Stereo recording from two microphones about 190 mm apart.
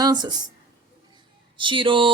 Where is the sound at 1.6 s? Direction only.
25° right (ahead or behind).